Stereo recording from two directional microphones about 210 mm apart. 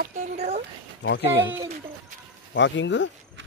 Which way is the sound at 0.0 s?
35° right (ahead or behind).